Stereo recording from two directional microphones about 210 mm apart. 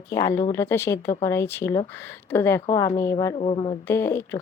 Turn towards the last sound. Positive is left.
turn(degrees=10)  # may be behind; listen again after turning